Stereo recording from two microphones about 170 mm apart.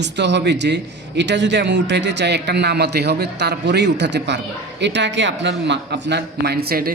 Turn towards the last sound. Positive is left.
turn(degrees=-65)  # may be behind; listen again after turning